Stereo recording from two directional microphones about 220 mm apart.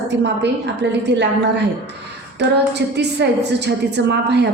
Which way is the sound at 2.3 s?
50° right (ahead or behind).